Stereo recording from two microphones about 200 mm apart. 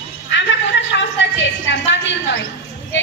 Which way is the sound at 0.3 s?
65° left (ahead or behind).